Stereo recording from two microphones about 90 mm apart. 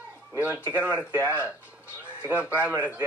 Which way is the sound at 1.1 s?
25° left (ahead or behind).